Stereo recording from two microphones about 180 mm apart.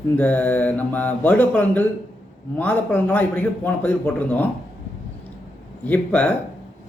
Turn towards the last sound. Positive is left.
turn(degrees=10)  # may be behind; listen again after turning